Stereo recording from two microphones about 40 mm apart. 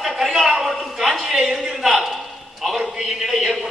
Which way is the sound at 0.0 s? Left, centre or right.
Centre.